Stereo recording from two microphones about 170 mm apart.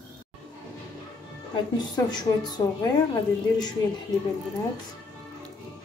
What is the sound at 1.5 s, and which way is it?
A woman's voice, 25° left (ahead or behind).